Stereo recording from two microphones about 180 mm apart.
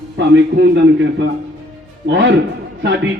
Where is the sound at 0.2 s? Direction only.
80° right.